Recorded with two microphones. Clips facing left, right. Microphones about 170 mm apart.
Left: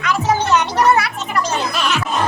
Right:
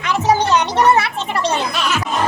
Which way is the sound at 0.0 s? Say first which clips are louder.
Even; 25° right (ahead or behind).